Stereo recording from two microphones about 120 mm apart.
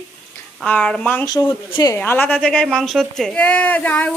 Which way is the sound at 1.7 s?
40° left (ahead or behind).